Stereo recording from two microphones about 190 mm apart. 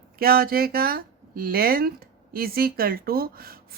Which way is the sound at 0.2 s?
50° right (ahead or behind).